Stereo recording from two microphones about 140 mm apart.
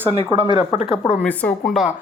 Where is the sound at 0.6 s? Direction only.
40° left (ahead or behind).